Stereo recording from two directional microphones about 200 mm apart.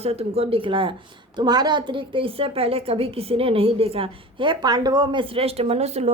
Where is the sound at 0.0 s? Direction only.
30° right (ahead or behind).